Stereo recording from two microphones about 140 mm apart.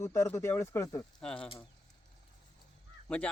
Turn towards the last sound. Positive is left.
turn(degrees=5)  # may be behind; listen again after turning